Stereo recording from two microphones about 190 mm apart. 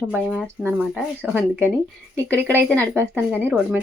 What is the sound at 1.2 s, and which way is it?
Speech, 10° right (ahead or behind).